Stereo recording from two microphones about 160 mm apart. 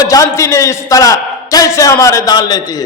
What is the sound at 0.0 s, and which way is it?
A man's voice, 20° left (ahead or behind).